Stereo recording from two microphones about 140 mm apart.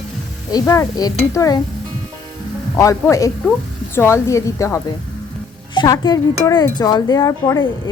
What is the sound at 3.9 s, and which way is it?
A woman's voice, 20° left (ahead or behind).